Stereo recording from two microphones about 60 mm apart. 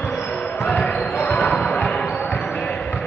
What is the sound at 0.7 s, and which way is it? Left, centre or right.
Basketball bounce, left.